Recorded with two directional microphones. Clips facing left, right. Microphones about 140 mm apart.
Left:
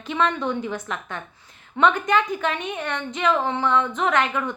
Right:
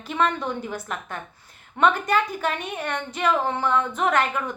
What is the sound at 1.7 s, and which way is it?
Speech, 35° right (ahead or behind).